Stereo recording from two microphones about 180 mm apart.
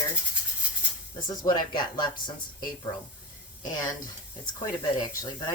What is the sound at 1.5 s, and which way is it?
Speech, 25° left (ahead or behind).